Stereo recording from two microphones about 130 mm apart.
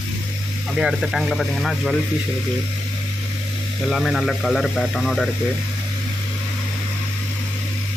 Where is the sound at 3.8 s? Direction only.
Centre (ahead or behind).